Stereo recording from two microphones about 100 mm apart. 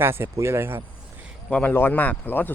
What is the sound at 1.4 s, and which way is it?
Speech, 15° left (ahead or behind).